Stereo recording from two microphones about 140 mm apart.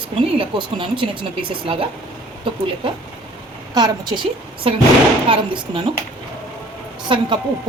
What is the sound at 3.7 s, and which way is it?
A woman's voice, 30° right (ahead or behind).